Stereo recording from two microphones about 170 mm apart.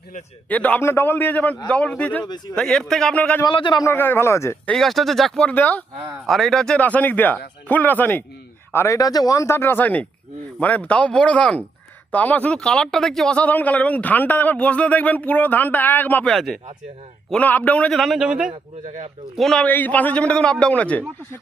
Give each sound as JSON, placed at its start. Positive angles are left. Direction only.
{"t": 0.4, "sound": "speech", "side_deg": 10}
{"t": 2.2, "sound": "speech", "side_deg": 25}
{"t": 2.6, "sound": "a man's voice", "side_deg": 5}
{"t": 3.4, "sound": "speech", "side_deg": 25}
{"t": 4.7, "sound": "a man's voice", "side_deg": 0}